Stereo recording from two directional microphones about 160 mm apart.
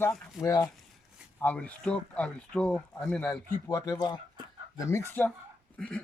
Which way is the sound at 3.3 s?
20° left (ahead or behind).